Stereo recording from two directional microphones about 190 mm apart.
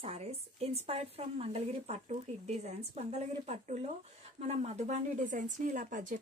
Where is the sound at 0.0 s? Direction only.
35° right (ahead or behind).